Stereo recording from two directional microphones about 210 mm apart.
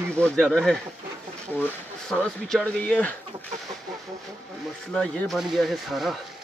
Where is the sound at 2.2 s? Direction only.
5° left (ahead or behind).